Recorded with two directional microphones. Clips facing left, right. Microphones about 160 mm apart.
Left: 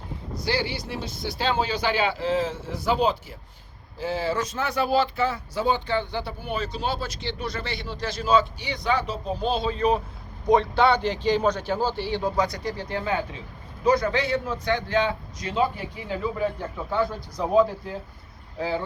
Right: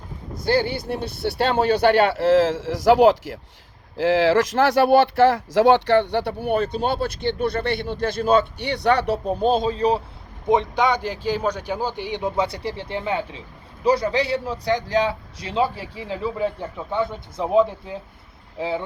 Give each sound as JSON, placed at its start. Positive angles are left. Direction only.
{"t": 0.3, "sound": "speech", "side_deg": -50}
{"t": 9.4, "sound": "a man's voice", "side_deg": -45}
{"t": 10.5, "sound": "a man's voice", "side_deg": -15}